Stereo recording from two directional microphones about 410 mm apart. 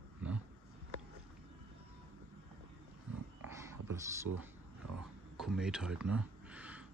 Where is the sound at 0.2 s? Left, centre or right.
Centre.